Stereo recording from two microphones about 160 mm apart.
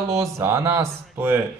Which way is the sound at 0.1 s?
20° right (ahead or behind).